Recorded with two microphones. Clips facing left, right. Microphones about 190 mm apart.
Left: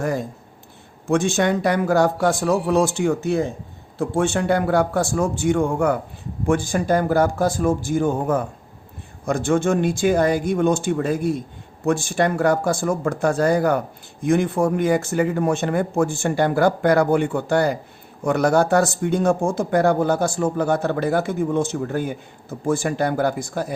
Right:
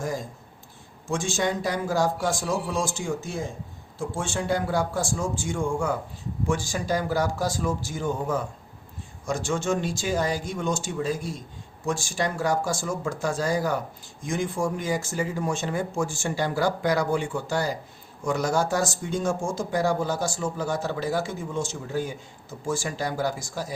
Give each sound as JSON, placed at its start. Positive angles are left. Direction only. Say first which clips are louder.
{"t": 0.0, "sound": "speech", "louder": "left 7 dB", "side_deg": 60}